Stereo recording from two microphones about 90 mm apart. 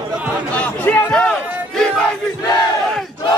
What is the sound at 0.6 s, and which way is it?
Speech, 20° left (ahead or behind).